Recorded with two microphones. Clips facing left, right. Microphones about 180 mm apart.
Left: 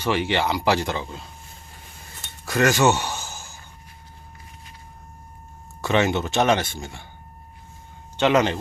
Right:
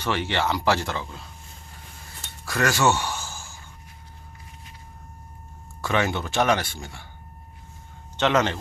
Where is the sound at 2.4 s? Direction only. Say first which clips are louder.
Left 3 dB; 20° left (ahead or behind).